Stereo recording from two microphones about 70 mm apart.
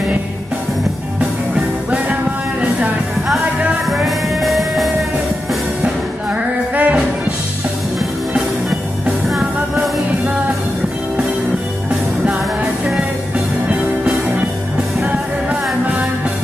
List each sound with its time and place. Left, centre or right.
3.9 s music: centre
6.3 s music: centre
13.7 s music: centre